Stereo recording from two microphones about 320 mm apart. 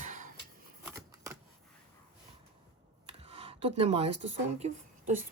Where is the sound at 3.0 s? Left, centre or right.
Centre.